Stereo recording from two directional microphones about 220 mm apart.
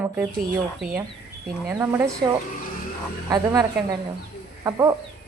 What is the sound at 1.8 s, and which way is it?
A woman's voice, 10° right (ahead or behind).